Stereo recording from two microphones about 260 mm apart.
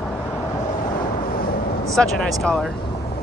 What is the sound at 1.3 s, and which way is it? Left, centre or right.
Vehicle, left.